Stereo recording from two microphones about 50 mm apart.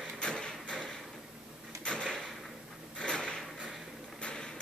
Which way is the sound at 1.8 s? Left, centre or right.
Centre.